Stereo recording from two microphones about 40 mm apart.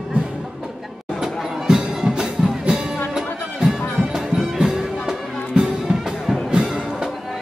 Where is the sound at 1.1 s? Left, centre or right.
Centre.